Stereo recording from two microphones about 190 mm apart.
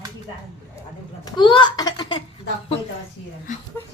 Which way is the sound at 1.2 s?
25° left (ahead or behind).